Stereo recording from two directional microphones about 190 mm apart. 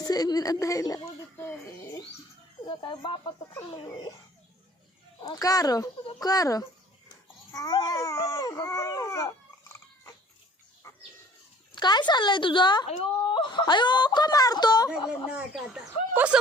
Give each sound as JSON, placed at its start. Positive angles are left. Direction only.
{"t": 0.0, "sound": "speech", "side_deg": 20}
{"t": 2.6, "sound": "speech", "side_deg": 25}
{"t": 5.2, "sound": "speech", "side_deg": 20}
{"t": 7.5, "sound": "baby cry", "side_deg": 20}
{"t": 10.8, "sound": "pig", "side_deg": 15}
{"t": 11.7, "sound": "speech", "side_deg": 25}
{"t": 14.8, "sound": "speech", "side_deg": -5}